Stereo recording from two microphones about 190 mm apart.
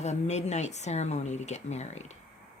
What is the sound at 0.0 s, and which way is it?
A woman's voice, 35° left (ahead or behind).